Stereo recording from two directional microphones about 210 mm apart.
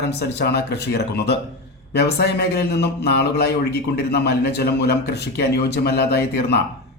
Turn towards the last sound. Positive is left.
turn(degrees=50)  # may be behind; listen again after turning